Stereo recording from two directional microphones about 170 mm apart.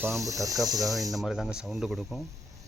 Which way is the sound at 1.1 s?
5° right (ahead or behind).